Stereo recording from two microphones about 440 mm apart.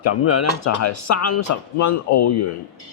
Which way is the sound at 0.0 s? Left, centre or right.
Left.